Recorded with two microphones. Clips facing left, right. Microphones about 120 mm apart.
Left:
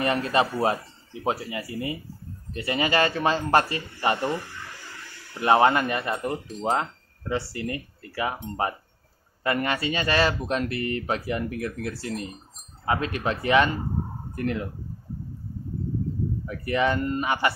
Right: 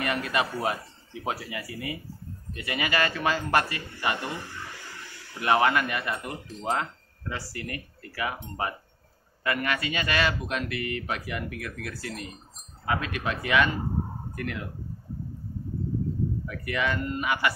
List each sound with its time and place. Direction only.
0.0 s speech: 30° left (ahead or behind)
5.4 s speech: 30° left (ahead or behind)
16.4 s speech: 30° left (ahead or behind)